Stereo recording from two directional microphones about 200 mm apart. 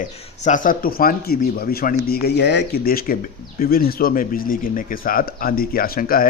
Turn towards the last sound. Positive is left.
turn(degrees=45)  # may be behind; listen again after turning